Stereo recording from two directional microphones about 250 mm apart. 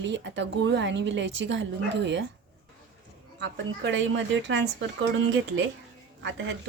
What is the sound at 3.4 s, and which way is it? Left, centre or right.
A woman's voice, right.